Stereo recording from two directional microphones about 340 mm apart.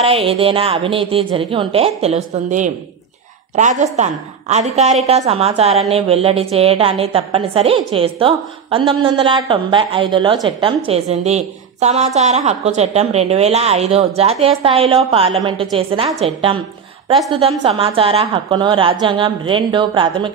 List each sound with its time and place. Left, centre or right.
0.0 s a woman's voice: centre